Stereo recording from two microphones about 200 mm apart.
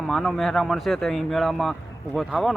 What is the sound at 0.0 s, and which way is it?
Speech, centre (ahead or behind).